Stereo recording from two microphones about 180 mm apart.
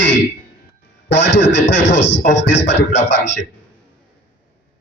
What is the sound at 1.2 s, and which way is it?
A man's voice, 80° left.